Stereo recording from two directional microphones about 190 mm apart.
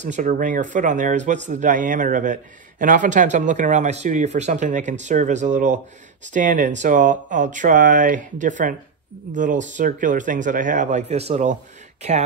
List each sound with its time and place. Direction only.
0.0 s speech: 40° right (ahead or behind)